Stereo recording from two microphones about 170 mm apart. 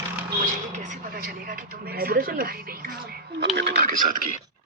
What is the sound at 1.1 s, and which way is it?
Speech, 60° right (ahead or behind).